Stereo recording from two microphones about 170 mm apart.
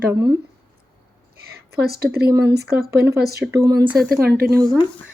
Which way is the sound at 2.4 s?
75° right (ahead or behind).